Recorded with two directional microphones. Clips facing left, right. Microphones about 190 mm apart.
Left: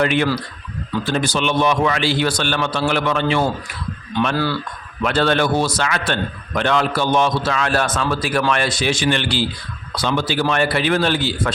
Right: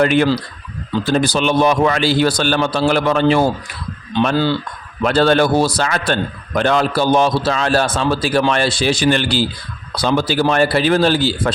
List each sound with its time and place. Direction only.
0.0 s a man's voice: 40° right (ahead or behind)